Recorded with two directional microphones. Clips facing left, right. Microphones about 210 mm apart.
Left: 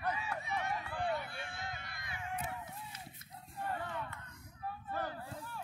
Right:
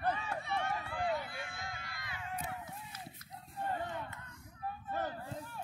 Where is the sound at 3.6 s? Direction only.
20° right (ahead or behind).